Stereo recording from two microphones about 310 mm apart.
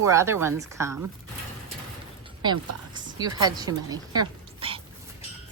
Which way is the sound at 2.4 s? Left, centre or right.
Centre.